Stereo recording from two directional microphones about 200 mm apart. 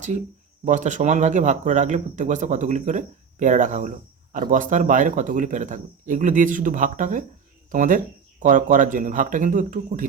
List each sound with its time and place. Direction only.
0.6 s speech: 40° right (ahead or behind)